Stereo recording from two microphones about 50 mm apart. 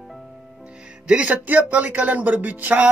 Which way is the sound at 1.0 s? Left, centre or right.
Centre.